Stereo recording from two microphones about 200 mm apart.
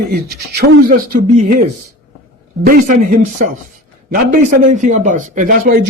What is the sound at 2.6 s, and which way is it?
A man's voice, 40° right (ahead or behind).